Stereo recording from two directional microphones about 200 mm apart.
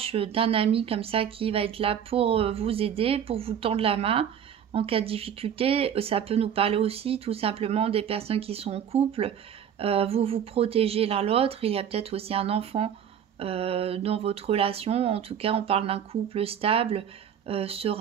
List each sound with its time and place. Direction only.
0.0 s speech: 30° right (ahead or behind)